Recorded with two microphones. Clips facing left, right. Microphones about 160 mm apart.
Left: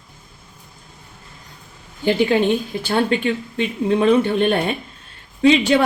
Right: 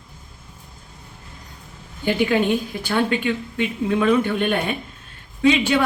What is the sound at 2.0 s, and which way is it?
A woman's voice, 30° left (ahead or behind).